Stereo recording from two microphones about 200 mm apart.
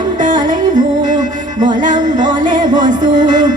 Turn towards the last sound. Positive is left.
turn(degrees=-40)  # may be behind; listen again after turning